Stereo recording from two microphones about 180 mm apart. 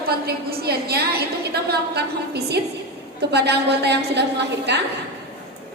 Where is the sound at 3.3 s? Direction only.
65° right (ahead or behind).